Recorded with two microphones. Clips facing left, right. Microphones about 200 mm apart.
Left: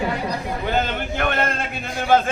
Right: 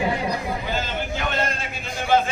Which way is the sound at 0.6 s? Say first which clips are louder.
Left 4 dB; 60° left (ahead or behind).